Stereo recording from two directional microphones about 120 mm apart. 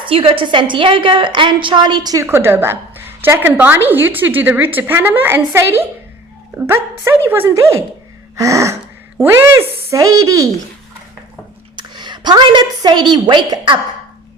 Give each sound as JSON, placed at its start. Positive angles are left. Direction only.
{"t": 0.0, "sound": "a woman's voice", "side_deg": -50}
{"t": 2.2, "sound": "a woman's voice", "side_deg": -20}
{"t": 11.8, "sound": "a woman's voice", "side_deg": -40}